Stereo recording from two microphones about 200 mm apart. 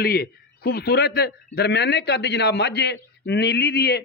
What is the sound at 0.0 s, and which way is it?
A man's voice, 50° left (ahead or behind).